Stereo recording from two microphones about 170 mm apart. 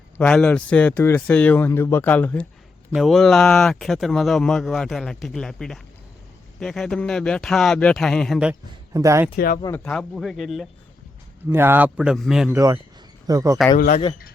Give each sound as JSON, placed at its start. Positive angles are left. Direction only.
{"t": 0.2, "sound": "speech", "side_deg": 5}
{"t": 8.9, "sound": "speech", "side_deg": -20}
{"t": 9.3, "sound": "speech", "side_deg": 60}
{"t": 9.7, "sound": "speech", "side_deg": 5}
{"t": 11.4, "sound": "a man's voice", "side_deg": -15}
{"t": 12.5, "sound": "a man's voice", "side_deg": -15}
{"t": 13.7, "sound": "speech", "side_deg": 55}